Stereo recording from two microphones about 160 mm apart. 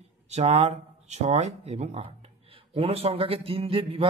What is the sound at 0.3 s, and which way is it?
Speech, 40° right (ahead or behind).